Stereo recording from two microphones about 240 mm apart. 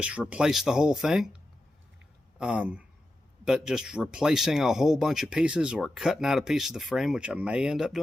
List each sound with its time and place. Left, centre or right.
0.0 s speech: centre
2.4 s speech: centre